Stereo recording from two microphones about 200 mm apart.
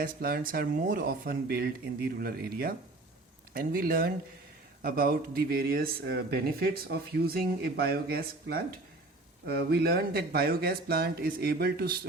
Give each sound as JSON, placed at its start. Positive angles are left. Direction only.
{"t": 0.0, "sound": "speech", "side_deg": -50}